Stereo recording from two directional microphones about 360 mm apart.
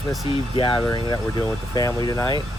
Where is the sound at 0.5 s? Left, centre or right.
Centre.